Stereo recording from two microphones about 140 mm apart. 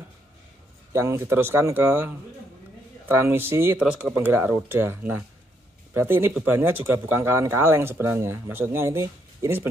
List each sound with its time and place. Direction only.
0.9 s speech: 20° right (ahead or behind)